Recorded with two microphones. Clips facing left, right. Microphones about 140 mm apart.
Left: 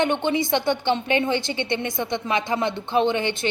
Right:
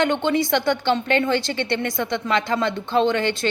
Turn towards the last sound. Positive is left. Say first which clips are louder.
# right 2 dB
turn(degrees=20)  # may be behind; listen again after turning